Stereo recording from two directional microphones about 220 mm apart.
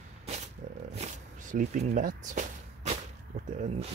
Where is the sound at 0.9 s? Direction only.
30° right (ahead or behind).